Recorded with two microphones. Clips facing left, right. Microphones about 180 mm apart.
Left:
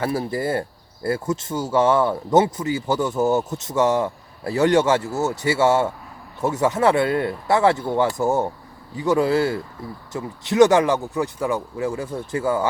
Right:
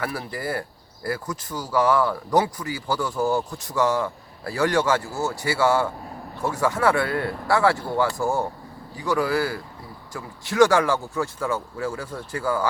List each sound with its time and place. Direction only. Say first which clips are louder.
0.0 s speech: left 6 dB; 25° left (ahead or behind)